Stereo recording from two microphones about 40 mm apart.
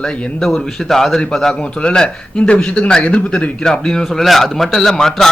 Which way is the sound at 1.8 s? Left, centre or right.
Left.